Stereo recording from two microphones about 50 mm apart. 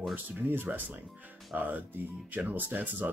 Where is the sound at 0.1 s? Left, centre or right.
Right.